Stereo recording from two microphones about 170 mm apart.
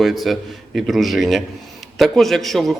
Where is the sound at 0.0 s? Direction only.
Centre (ahead or behind).